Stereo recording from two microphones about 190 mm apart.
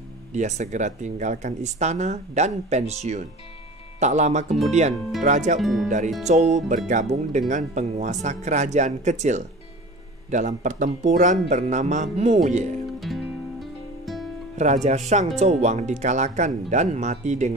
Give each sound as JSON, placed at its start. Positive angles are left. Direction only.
{"t": 0.3, "sound": "speech", "side_deg": -40}
{"t": 4.0, "sound": "speech", "side_deg": -40}
{"t": 5.6, "sound": "speech", "side_deg": 0}
{"t": 5.9, "sound": "speech", "side_deg": -40}
{"t": 12.8, "sound": "music", "side_deg": 0}
{"t": 14.6, "sound": "speech", "side_deg": -35}